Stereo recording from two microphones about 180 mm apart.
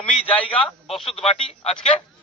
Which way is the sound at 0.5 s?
30° left (ahead or behind).